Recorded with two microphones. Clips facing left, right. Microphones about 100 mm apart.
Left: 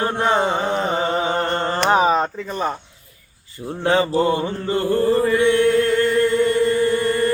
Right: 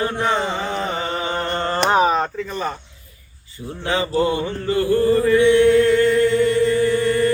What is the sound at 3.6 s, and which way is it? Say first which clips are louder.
Music: left 3 dB; 35° left (ahead or behind).